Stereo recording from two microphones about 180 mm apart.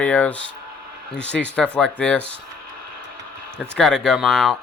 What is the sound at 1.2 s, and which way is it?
Speech, 75° left (ahead or behind).